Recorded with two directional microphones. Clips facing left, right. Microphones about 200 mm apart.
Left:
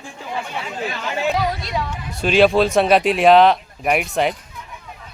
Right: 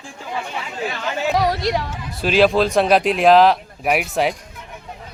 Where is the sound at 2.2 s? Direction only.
Centre (ahead or behind).